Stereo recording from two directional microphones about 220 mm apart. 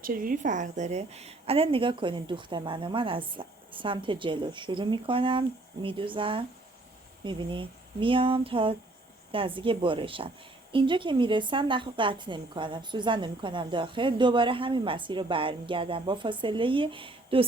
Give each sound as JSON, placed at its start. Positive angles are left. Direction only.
{"t": 0.0, "sound": "a woman's voice", "side_deg": -40}